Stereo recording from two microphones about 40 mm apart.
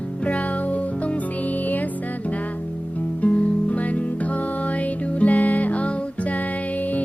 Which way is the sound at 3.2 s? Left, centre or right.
Left.